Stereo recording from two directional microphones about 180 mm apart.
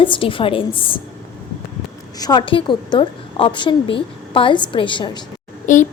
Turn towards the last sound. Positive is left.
turn(degrees=45)  # may be behind; listen again after turning